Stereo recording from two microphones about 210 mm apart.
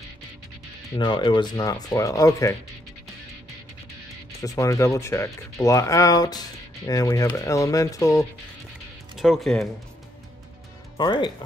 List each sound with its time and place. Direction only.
0.9 s speech: 20° left (ahead or behind)
4.4 s speech: 15° left (ahead or behind)
9.1 s speech: centre (ahead or behind)
11.0 s speech: 20° left (ahead or behind)